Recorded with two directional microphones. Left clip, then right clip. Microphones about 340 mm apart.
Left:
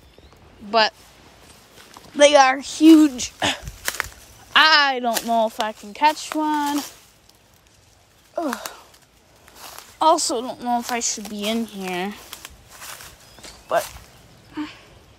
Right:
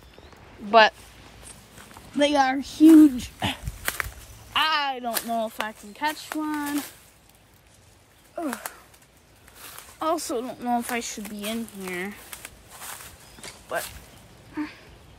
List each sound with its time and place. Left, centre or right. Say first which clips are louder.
0.7 s speech: right 2 dB; centre
2.1 s speech: left 8 dB; left
3.8 s a sound: left 2 dB; centre
4.5 s speech: left 9 dB; centre
8.4 s speech: left 6 dB; centre